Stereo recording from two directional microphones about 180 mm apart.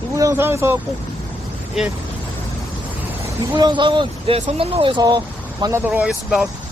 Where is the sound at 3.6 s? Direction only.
25° right (ahead or behind).